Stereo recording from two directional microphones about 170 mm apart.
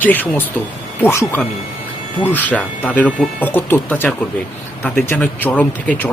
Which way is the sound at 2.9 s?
10° left (ahead or behind).